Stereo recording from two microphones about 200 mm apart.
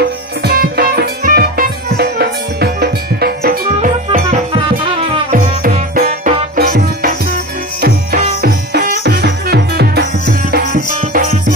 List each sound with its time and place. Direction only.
0.4 s music: 50° right (ahead or behind)
4.1 s music: 30° right (ahead or behind); by 10.0 s 50° right (ahead or behind)
10.5 s music: 40° right (ahead or behind)